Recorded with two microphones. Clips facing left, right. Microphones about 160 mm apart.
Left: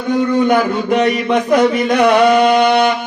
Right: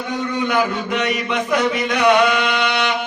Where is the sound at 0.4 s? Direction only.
45° left (ahead or behind).